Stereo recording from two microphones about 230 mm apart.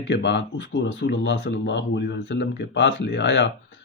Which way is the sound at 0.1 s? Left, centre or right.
Left.